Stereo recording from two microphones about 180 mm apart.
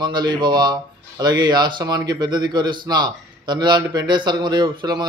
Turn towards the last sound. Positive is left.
turn(degrees=-25)  # may be behind; listen again after turning